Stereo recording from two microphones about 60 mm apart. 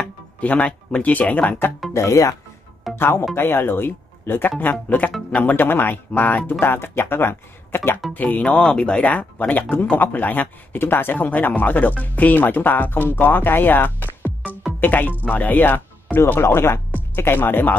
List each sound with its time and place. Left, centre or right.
0.4 s speech: left
2.0 s speech: left
3.0 s speech: left
6.6 s speech: left
16.2 s speech: left